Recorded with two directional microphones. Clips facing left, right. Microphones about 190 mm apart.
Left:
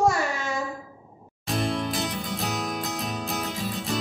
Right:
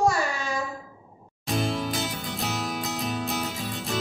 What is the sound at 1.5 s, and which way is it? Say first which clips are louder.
Music: even; centre (ahead or behind).